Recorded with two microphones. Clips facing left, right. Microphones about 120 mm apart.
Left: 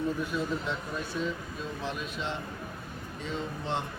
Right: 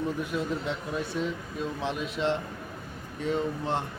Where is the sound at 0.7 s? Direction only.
70° right (ahead or behind).